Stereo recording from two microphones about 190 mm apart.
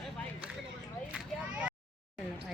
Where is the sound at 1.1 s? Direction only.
5° right (ahead or behind).